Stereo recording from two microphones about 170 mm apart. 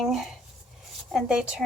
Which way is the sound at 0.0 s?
Centre (ahead or behind).